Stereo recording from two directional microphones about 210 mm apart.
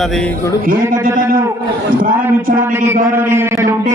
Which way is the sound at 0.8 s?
10° right (ahead or behind).